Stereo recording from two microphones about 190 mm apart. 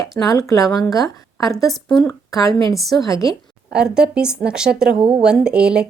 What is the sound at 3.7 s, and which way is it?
Speech, 5° right (ahead or behind).